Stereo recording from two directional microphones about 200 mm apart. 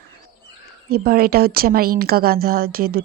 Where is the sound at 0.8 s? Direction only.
50° right (ahead or behind).